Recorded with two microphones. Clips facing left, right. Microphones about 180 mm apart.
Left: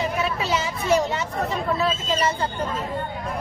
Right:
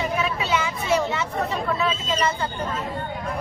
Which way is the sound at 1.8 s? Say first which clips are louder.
Left 1 dB; 35° left (ahead or behind).